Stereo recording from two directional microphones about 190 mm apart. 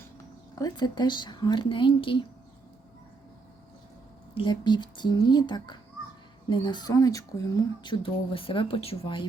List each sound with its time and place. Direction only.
0.6 s a woman's voice: 25° left (ahead or behind)
4.4 s a woman's voice: 25° left (ahead or behind)
7.9 s a woman's voice: 30° left (ahead or behind)